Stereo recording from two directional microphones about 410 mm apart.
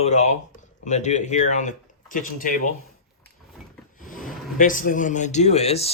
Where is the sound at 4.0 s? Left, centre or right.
Centre.